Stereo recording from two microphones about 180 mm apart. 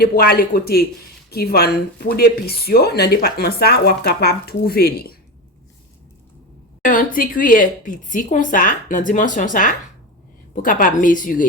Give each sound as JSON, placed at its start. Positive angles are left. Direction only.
{"t": 0.0, "sound": "speech", "side_deg": 60}
{"t": 6.8, "sound": "a woman's voice", "side_deg": 50}